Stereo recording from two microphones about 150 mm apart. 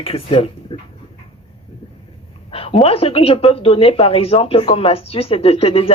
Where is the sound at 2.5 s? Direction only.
40° left (ahead or behind).